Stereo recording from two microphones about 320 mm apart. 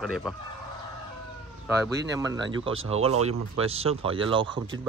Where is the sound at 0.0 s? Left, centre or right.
Centre.